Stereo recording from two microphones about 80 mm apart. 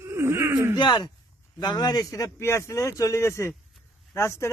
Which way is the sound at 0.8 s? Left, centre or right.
Left.